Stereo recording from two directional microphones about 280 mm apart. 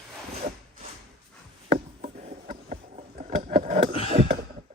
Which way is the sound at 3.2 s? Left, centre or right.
Right.